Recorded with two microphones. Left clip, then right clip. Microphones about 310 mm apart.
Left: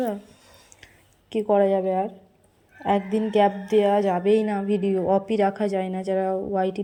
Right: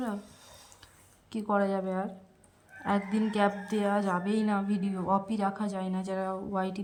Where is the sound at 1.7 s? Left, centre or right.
Right.